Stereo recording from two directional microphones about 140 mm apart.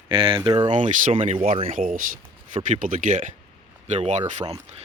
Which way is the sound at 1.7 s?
75° right (ahead or behind).